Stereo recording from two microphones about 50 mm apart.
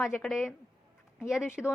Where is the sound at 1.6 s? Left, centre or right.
Centre.